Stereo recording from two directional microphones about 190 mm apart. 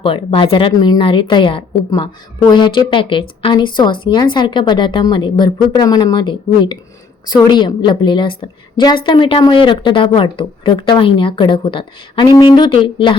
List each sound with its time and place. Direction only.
0.0 s speech: 30° left (ahead or behind)